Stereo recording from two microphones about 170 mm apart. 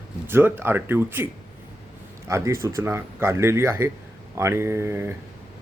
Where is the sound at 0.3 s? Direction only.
15° right (ahead or behind).